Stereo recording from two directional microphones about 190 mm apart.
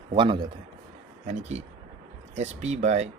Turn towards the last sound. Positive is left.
turn(degrees=-35)  # may be behind; listen again after turning